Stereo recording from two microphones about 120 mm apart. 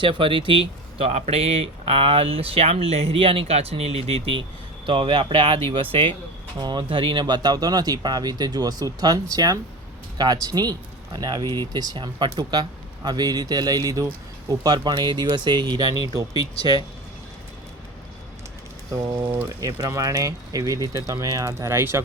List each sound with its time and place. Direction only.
0.0 s speech: 45° right (ahead or behind)
0.9 s speech: 60° right (ahead or behind); by 16.5 s 30° right (ahead or behind)
19.3 s speech: 25° right (ahead or behind)